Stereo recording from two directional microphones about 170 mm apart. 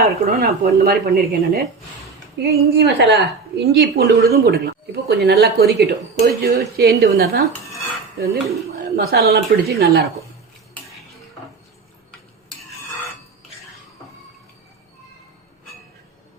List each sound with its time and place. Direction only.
0.3 s a woman's voice: 60° right (ahead or behind)